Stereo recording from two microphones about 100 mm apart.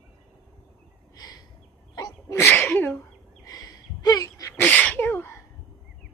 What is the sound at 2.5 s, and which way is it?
Sneeze, 20° left (ahead or behind).